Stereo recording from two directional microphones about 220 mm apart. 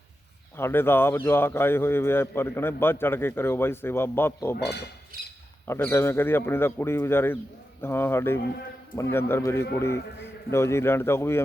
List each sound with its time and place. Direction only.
0.5 s a man's voice: 10° left (ahead or behind)
4.5 s speech: 50° left (ahead or behind)
5.6 s a man's voice: 10° left (ahead or behind)